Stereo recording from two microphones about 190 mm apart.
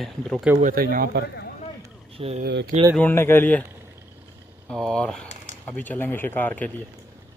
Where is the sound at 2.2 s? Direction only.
30° right (ahead or behind).